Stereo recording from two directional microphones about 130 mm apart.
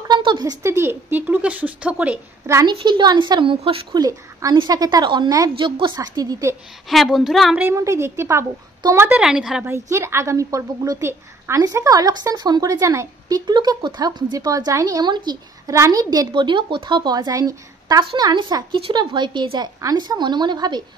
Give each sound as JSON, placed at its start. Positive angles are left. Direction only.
{"t": 0.1, "sound": "a sound", "side_deg": -35}
{"t": 0.7, "sound": "speech", "side_deg": -20}
{"t": 2.4, "sound": "a woman's voice", "side_deg": -20}
{"t": 2.7, "sound": "a woman's voice", "side_deg": -40}
{"t": 3.9, "sound": "a woman's voice", "side_deg": -30}
{"t": 5.9, "sound": "a woman's voice", "side_deg": -30}
{"t": 6.9, "sound": "a woman's voice", "side_deg": 0}
{"t": 7.6, "sound": "a woman's voice", "side_deg": -25}
{"t": 9.2, "sound": "a woman's voice", "side_deg": -5}
{"t": 9.7, "sound": "a woman's voice", "side_deg": -20}
{"t": 13.5, "sound": "a woman's voice", "side_deg": -35}